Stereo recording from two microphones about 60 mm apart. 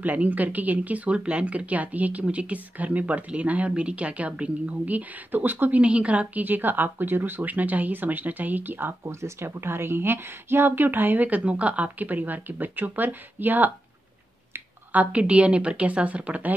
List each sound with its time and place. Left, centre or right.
0.0 s speech: right
5.8 s speech: right
9.0 s speech: right